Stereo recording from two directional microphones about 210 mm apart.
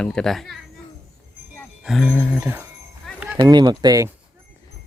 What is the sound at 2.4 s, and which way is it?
Speech, 10° right (ahead or behind).